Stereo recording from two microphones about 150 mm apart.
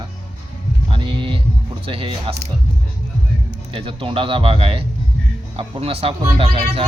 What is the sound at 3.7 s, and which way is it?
Speech, 40° right (ahead or behind).